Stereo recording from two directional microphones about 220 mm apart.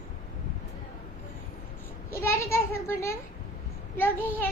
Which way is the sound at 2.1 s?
10° left (ahead or behind).